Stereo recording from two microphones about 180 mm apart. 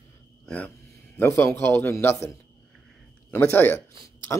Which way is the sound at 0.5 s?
10° left (ahead or behind).